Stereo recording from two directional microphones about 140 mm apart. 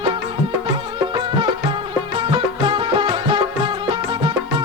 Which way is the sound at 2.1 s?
35° right (ahead or behind).